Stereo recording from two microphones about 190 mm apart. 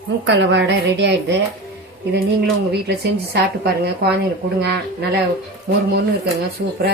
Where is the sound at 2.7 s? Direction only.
60° right (ahead or behind).